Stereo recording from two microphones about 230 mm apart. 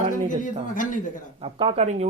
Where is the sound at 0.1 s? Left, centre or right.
Left.